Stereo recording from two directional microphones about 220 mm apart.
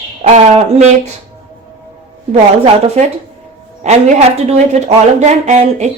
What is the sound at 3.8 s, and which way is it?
A woman's voice, 30° right (ahead or behind).